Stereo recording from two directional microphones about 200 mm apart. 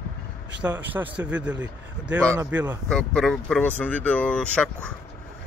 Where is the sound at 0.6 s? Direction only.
10° right (ahead or behind).